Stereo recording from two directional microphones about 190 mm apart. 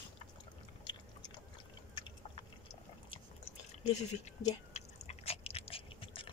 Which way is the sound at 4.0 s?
35° left (ahead or behind).